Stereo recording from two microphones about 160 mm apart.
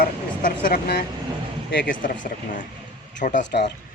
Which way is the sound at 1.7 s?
60° left (ahead or behind).